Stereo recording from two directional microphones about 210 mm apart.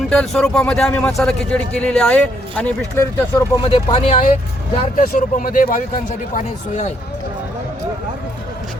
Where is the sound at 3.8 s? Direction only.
25° left (ahead or behind).